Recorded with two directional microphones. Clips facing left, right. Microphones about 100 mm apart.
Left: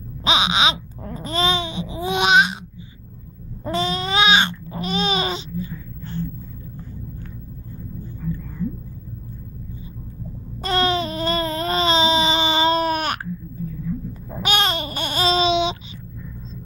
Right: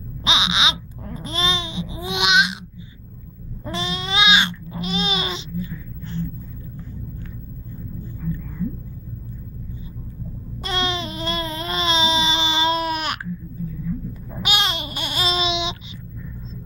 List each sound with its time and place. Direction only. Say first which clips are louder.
0.2 s babbling: left 3 dB; 40° left (ahead or behind)
3.6 s babbling: left 5 dB; 40° left (ahead or behind)
10.6 s baby cry: left 5 dB; 40° left (ahead or behind)
14.4 s babbling: left 3 dB; 40° left (ahead or behind)